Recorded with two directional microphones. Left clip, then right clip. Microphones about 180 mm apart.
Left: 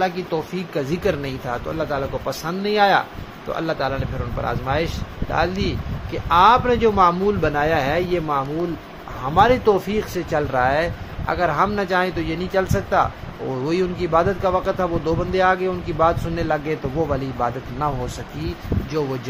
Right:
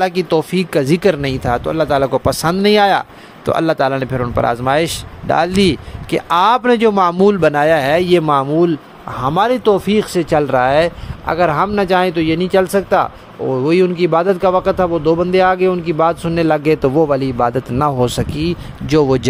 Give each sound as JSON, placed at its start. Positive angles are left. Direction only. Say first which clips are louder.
{"t": 0.0, "sound": "speech", "louder": "right 7 dB", "side_deg": -70}
{"t": 9.2, "sound": "speech", "louder": "right 2 dB", "side_deg": -55}